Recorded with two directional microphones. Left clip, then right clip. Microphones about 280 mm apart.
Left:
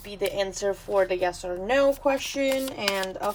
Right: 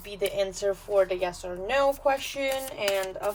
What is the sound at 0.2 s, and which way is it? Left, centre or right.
Speech, left.